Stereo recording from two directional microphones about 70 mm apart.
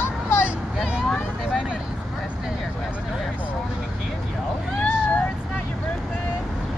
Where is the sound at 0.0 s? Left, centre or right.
Left.